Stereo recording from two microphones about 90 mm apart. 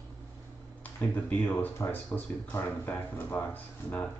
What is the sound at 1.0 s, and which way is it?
Speech, 20° left (ahead or behind).